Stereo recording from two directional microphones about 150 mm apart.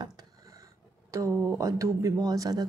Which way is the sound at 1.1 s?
20° right (ahead or behind).